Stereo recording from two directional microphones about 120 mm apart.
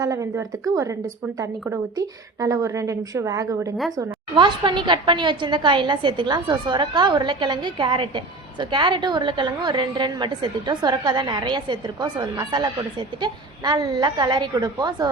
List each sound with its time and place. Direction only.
0.0 s a woman's voice: 25° right (ahead or behind)
2.0 s a woman's voice: 30° right (ahead or behind)
3.9 s a woman's voice: 40° right (ahead or behind)